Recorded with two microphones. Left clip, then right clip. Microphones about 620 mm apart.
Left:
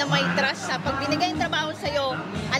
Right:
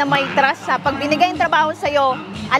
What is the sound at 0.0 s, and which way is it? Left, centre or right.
A woman's voice, right.